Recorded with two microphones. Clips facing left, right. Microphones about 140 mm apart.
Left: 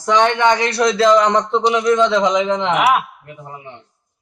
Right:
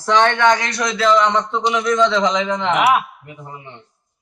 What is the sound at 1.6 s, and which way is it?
A man's voice, 15° left (ahead or behind).